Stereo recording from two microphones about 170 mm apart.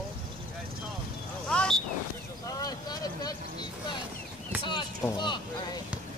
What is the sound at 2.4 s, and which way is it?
Vehicle, 20° left (ahead or behind).